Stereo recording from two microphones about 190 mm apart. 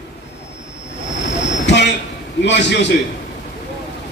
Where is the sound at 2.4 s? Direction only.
65° left (ahead or behind).